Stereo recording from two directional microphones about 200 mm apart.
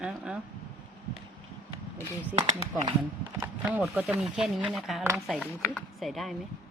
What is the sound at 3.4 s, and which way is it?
Speech, 10° right (ahead or behind).